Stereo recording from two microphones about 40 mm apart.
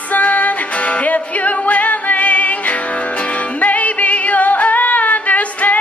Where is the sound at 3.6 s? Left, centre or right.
Left.